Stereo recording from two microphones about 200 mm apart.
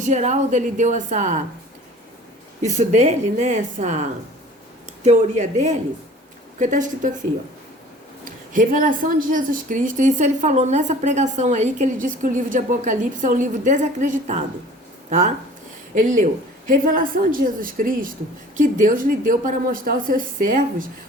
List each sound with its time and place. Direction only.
0.0 s a woman's voice: 35° right (ahead or behind)
2.6 s a woman's voice: 35° right (ahead or behind)
5.0 s a woman's voice: 35° right (ahead or behind)
8.2 s a woman's voice: 40° right (ahead or behind)
16.0 s a woman's voice: 40° right (ahead or behind)